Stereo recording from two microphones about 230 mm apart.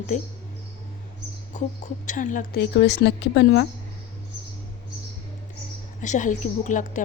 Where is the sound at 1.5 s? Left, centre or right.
Left.